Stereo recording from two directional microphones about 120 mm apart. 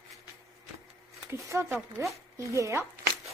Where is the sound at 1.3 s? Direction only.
20° right (ahead or behind).